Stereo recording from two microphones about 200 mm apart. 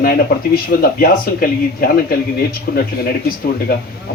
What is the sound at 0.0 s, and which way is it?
Speech, 50° left (ahead or behind).